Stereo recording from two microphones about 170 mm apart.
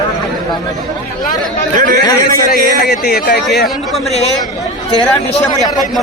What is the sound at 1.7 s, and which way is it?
Speech, 50° right (ahead or behind).